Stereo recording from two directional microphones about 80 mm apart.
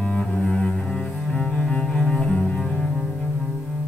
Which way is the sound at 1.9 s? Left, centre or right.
Centre.